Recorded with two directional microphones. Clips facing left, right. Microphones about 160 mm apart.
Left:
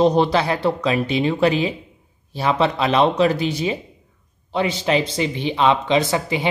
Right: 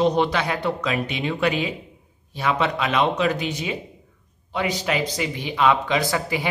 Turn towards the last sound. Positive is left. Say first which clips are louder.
# left 3 dB
turn(degrees=25)  # may be behind; listen again after turning